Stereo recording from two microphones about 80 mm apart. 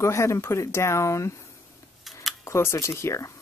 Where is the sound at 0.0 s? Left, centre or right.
Left.